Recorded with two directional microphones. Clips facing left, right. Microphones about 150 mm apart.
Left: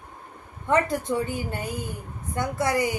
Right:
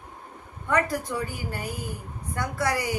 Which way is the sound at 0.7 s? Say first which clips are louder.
Left 3 dB; 25° left (ahead or behind).